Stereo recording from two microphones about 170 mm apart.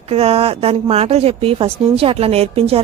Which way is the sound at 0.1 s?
35° right (ahead or behind).